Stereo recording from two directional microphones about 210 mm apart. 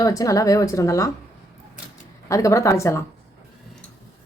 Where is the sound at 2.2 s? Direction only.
15° left (ahead or behind).